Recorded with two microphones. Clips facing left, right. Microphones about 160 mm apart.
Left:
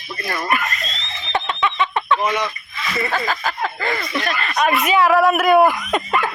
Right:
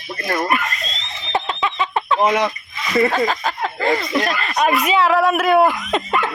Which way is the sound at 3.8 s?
25° right (ahead or behind).